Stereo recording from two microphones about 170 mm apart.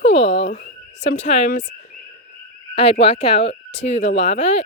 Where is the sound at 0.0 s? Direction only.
35° left (ahead or behind).